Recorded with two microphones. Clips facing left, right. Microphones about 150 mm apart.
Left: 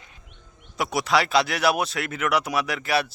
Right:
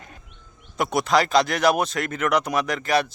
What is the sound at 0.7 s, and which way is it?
Speech, centre (ahead or behind).